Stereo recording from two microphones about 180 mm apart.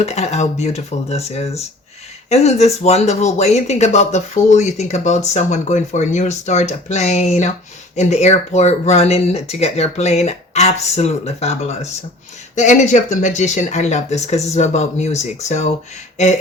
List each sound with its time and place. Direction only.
0.0 s speech: 40° left (ahead or behind)